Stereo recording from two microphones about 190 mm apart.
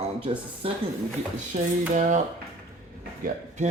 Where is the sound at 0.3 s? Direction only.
30° right (ahead or behind).